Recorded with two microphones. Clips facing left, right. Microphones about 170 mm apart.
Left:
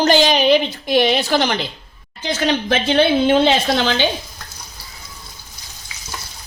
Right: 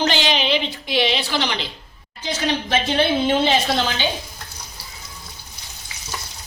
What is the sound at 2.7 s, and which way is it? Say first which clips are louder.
A woman's voice: left 4 dB; 65° left (ahead or behind).